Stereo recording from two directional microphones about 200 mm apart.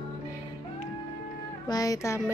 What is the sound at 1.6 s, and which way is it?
Music, 20° left (ahead or behind).